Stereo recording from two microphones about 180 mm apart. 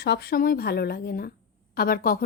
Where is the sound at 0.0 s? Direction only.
65° left (ahead or behind).